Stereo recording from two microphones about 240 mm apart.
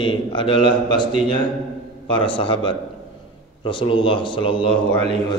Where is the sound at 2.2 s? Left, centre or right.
Left.